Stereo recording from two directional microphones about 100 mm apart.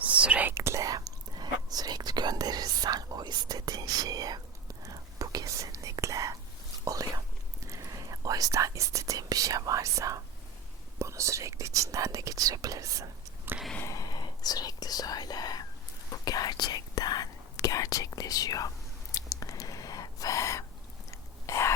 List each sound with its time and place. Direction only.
0.0 s whispering: 15° right (ahead or behind)
0.5 s whispering: 30° right (ahead or behind)
13.5 s a sound: 20° right (ahead or behind)
13.8 s whispering: 40° left (ahead or behind)
19.1 s gasp: 35° left (ahead or behind)
21.1 s whispering: 30° left (ahead or behind)